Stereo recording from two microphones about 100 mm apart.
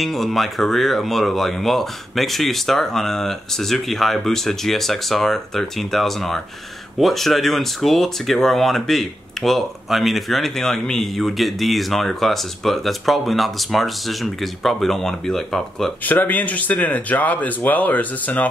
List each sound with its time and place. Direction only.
0.0 s speech: centre (ahead or behind)
16.0 s speech: 15° left (ahead or behind)